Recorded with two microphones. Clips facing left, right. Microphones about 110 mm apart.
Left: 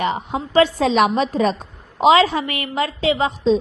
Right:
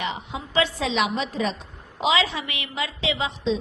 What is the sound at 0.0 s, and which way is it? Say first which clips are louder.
A woman's voice: left 8 dB; 45° left (ahead or behind).